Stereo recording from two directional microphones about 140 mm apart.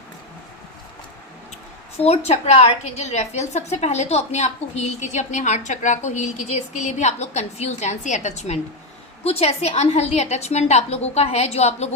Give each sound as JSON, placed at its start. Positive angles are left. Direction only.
{"t": 2.0, "sound": "a woman's voice", "side_deg": 50}
{"t": 9.2, "sound": "a woman's voice", "side_deg": 45}